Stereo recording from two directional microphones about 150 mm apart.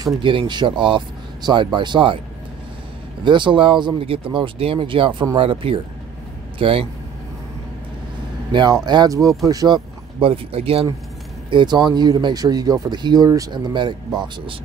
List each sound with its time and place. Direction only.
0.0 s speech: 30° right (ahead or behind)
3.3 s speech: 30° right (ahead or behind)
8.5 s speech: 30° right (ahead or behind)
10.2 s speech: 40° right (ahead or behind)
11.5 s speech: 30° right (ahead or behind)